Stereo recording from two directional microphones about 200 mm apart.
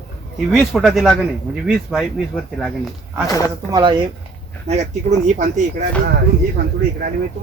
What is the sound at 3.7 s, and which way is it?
Speech, 20° right (ahead or behind).